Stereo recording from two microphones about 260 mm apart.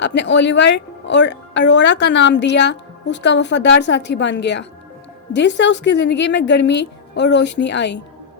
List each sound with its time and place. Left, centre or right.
0.0 s a woman's voice: left